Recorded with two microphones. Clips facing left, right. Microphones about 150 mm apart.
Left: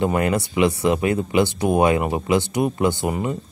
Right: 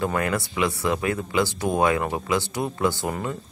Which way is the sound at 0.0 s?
20° left (ahead or behind).